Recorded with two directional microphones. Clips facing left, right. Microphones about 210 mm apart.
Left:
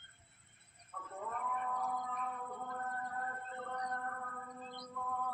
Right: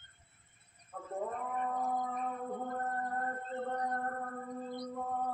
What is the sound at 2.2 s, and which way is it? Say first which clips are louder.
Whale vocalization: right 6 dB; 35° right (ahead or behind).